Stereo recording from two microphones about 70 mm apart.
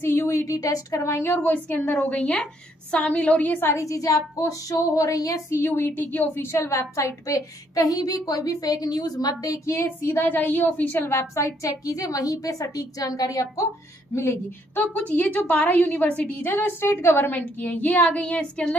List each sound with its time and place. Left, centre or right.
0.0 s a woman's voice: left
0.5 s a woman's voice: left
3.6 s a woman's voice: left
5.5 s a woman's voice: left
6.4 s a woman's voice: left
9.7 s a woman's voice: left
11.1 s a woman's voice: left
14.1 s speech: left
15.0 s a woman's voice: left
16.4 s a woman's voice: left